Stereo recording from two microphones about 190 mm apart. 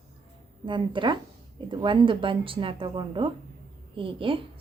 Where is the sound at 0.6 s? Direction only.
25° right (ahead or behind).